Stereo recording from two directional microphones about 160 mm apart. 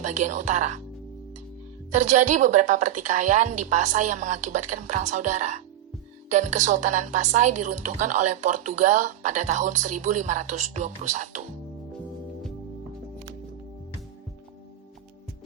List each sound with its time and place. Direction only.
0.0 s a woman's voice: 50° right (ahead or behind)
1.9 s a woman's voice: 50° right (ahead or behind)